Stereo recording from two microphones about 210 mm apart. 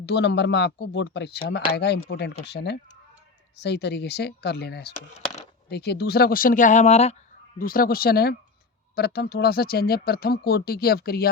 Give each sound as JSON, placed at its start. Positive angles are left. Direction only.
{"t": 0.0, "sound": "speech", "side_deg": 55}
{"t": 7.6, "sound": "speech", "side_deg": 45}